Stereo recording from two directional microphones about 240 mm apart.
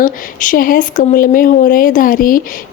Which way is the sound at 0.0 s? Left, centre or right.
Left.